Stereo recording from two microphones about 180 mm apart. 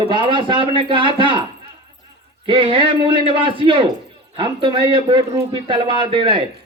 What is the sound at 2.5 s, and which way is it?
Speech, 30° right (ahead or behind).